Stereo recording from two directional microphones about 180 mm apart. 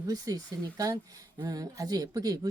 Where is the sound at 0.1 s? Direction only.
20° right (ahead or behind).